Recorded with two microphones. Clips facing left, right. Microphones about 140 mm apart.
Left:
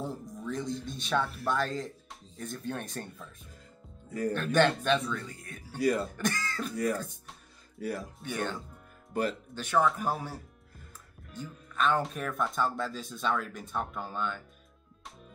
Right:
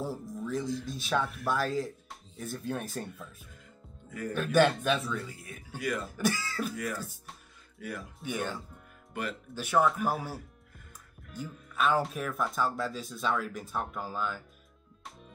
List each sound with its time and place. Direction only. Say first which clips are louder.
0.0 s music: right 2 dB; 5° right (ahead or behind)
0.8 s speech: even; 5° right (ahead or behind)
4.3 s speech: right 1 dB; 5° right (ahead or behind)
5.8 s speech: left 6 dB; 35° left (ahead or behind)
6.1 s speech: right 2 dB; 5° right (ahead or behind)
6.7 s speech: left 5 dB; 35° left (ahead or behind)
8.2 s speech: right 4 dB; 5° right (ahead or behind)
9.1 s speech: left 6 dB; 35° left (ahead or behind)
9.6 s speech: right 1 dB; 10° right (ahead or behind)
15.0 s music: right 1 dB; centre (ahead or behind)